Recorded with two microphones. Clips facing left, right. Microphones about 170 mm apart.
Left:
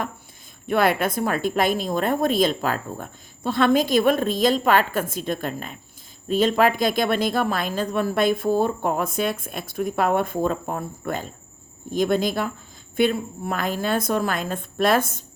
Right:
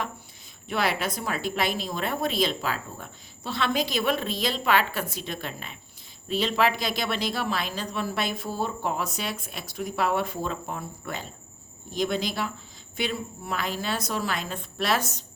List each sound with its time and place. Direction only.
0.7 s a woman's voice: 50° left (ahead or behind)